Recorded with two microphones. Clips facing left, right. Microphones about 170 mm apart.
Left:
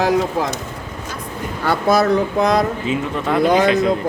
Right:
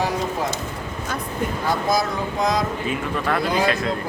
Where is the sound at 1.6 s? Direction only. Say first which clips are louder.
Left 8 dB; 65° left (ahead or behind).